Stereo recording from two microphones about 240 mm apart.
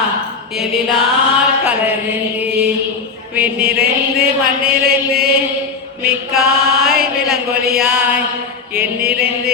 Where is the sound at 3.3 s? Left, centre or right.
Centre.